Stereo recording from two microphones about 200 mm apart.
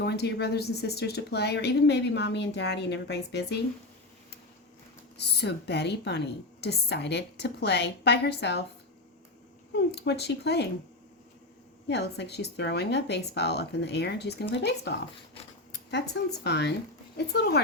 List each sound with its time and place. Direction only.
0.0 s speech: 55° left (ahead or behind)
5.1 s speech: 55° left (ahead or behind)
9.7 s speech: 55° left (ahead or behind)
11.9 s speech: 55° left (ahead or behind)